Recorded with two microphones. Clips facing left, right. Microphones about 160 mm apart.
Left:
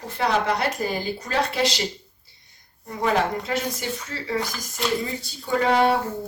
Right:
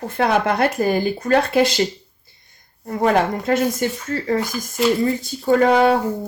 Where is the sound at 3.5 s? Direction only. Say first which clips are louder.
Right 8 dB; 50° right (ahead or behind).